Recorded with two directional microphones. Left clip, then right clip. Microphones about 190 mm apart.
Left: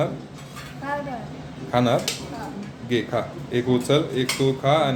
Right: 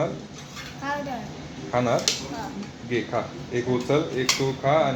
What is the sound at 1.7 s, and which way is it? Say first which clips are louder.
Speech: left 2 dB; 35° left (ahead or behind).